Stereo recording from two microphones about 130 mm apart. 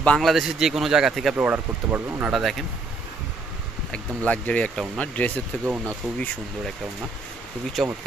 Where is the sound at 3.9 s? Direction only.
10° left (ahead or behind).